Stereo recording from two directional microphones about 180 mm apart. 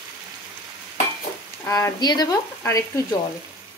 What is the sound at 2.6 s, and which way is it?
Frying, 15° left (ahead or behind).